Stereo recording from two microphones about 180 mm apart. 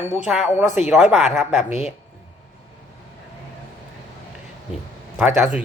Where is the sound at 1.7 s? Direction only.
40° left (ahead or behind).